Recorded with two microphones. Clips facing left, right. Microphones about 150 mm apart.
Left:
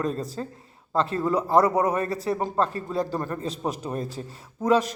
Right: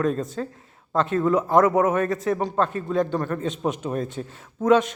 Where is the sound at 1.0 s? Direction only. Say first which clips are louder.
Right 3 dB; 35° left (ahead or behind).